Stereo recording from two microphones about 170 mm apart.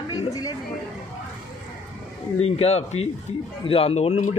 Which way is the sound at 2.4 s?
40° left (ahead or behind).